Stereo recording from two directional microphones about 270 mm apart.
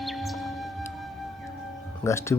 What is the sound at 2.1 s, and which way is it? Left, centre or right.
Speech, centre.